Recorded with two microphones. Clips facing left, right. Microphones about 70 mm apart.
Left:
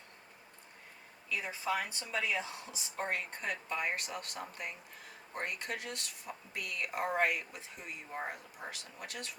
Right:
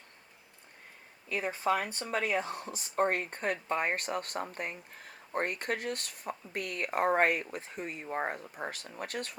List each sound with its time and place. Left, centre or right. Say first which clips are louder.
1.3 s speech: right 5 dB; right